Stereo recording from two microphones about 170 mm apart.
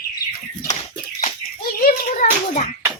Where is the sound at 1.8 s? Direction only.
50° left (ahead or behind).